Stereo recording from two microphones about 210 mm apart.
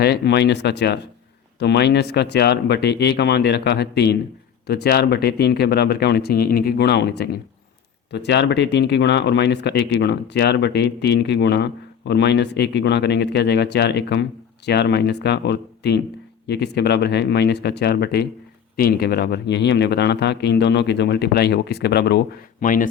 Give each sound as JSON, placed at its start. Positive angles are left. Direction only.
{"t": 0.0, "sound": "speech", "side_deg": 50}
{"t": 22.6, "sound": "speech", "side_deg": 40}